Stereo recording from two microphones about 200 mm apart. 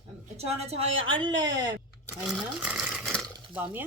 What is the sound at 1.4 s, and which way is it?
Speech, 65° right (ahead or behind).